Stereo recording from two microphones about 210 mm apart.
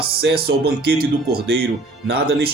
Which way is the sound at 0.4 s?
50° right (ahead or behind).